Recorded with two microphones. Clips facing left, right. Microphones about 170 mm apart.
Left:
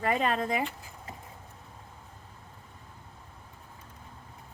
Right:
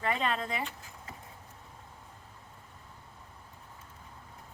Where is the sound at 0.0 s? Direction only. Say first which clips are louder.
Left 4 dB; 45° left (ahead or behind).